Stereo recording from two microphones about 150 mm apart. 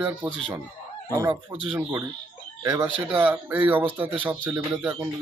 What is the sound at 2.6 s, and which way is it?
Speech, 25° right (ahead or behind).